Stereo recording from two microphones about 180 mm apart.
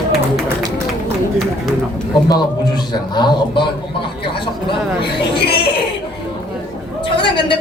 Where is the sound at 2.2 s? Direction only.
25° left (ahead or behind).